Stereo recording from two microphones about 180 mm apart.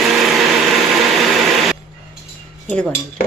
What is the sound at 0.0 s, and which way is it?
Vacuum cleaner, centre (ahead or behind).